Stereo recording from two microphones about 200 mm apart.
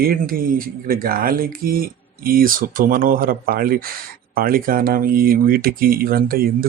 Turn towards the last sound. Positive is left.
turn(degrees=-50)  # may be behind; listen again after turning